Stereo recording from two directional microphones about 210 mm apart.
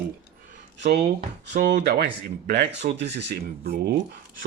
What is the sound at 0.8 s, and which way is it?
Speech, 50° right (ahead or behind).